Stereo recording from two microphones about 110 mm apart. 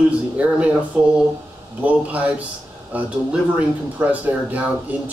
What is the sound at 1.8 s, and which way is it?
Speech, 15° right (ahead or behind).